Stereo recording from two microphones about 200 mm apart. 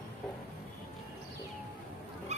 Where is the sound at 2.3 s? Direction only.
35° right (ahead or behind).